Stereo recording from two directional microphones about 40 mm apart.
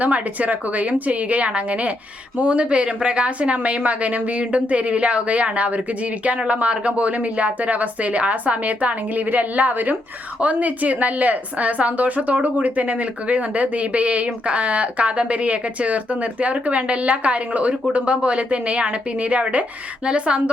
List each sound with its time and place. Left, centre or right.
0.0 s a woman's voice: right